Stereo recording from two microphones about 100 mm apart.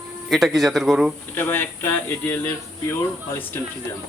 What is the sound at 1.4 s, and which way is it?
Speech, 20° left (ahead or behind).